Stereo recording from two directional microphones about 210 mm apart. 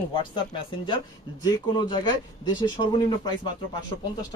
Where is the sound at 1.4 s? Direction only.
20° left (ahead or behind).